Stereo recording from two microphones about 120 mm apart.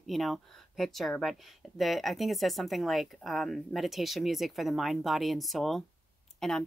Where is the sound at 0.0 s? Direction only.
Centre (ahead or behind).